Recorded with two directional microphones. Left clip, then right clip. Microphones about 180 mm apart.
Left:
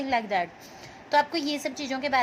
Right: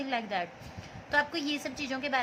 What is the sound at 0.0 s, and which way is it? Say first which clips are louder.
A woman's voice: left 6 dB; 25° left (ahead or behind).